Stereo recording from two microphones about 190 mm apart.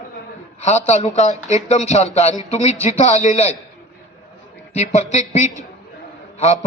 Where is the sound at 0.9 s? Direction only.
35° left (ahead or behind).